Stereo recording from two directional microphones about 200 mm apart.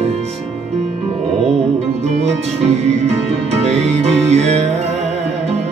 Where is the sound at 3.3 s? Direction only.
30° right (ahead or behind).